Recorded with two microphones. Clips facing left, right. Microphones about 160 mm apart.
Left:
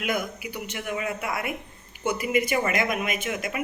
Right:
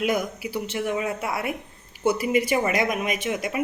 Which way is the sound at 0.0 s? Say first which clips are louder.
Right 4 dB; 35° right (ahead or behind).